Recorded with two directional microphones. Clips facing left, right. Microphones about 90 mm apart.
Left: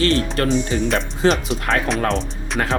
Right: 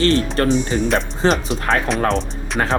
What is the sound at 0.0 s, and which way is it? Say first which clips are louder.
Speech: right 2 dB; 35° right (ahead or behind).